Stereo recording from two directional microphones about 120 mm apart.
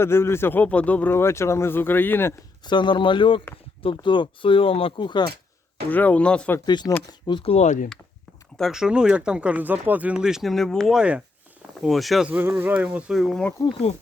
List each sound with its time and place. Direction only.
0.0 s speech: 20° left (ahead or behind)
2.6 s speech: 40° left (ahead or behind)
5.9 s speech: 15° left (ahead or behind)
6.7 s speech: 35° left (ahead or behind)
7.4 s speech: 65° left (ahead or behind)
8.5 s speech: centre (ahead or behind)
10.9 s speech: 10° right (ahead or behind)